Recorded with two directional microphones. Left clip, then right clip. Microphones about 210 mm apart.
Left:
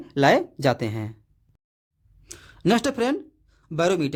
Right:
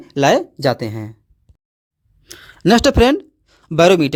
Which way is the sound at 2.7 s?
35° right (ahead or behind).